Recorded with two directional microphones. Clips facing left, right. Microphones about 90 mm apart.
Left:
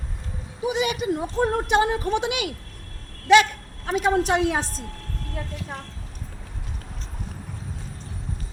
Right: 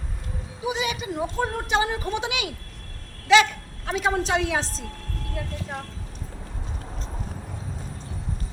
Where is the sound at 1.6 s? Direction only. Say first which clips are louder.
Left 3 dB; 55° left (ahead or behind).